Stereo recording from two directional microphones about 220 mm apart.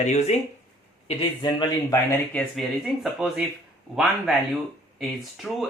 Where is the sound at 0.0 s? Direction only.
30° left (ahead or behind).